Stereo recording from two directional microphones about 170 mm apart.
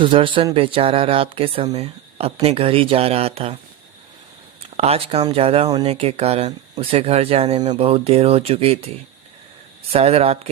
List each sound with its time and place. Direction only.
0.0 s speech: 30° right (ahead or behind)
4.8 s speech: 35° right (ahead or behind)
9.9 s speech: 35° right (ahead or behind)